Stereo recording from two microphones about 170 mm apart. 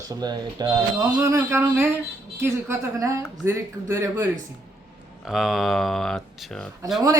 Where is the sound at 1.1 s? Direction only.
15° right (ahead or behind).